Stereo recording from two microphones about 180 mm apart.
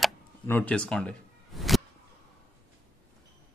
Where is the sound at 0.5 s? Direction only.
10° left (ahead or behind).